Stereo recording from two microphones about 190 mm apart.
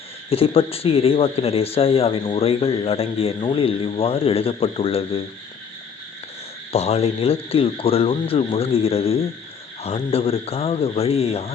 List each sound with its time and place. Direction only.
0.3 s speech: 30° left (ahead or behind)
6.7 s speech: 35° left (ahead or behind)